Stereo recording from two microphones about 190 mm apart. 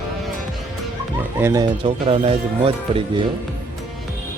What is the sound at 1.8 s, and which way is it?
Speech, 30° right (ahead or behind).